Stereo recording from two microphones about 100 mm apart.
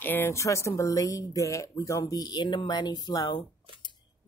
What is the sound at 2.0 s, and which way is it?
Speech, 45° left (ahead or behind).